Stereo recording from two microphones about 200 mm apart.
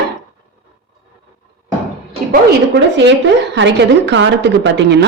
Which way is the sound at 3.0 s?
65° right (ahead or behind).